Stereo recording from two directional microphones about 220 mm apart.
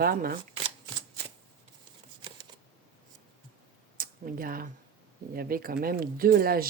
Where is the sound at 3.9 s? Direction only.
40° right (ahead or behind).